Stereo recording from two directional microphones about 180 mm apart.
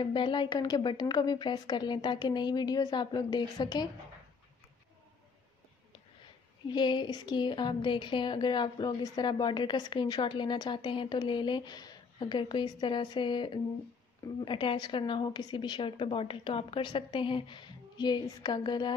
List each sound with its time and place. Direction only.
0.0 s a woman's voice: 25° left (ahead or behind)
6.7 s a woman's voice: 25° left (ahead or behind)